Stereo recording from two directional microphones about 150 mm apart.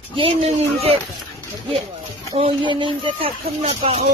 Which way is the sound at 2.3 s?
35° right (ahead or behind).